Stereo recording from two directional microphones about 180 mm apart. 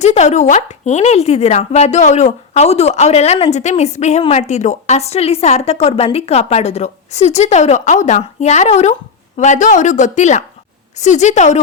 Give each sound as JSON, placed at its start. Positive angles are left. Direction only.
{"t": 0.0, "sound": "speech", "side_deg": 40}